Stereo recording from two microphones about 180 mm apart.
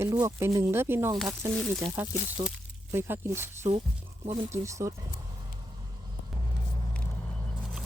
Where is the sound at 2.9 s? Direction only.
15° right (ahead or behind).